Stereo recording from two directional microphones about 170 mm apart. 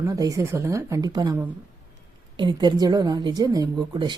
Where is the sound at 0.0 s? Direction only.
20° right (ahead or behind).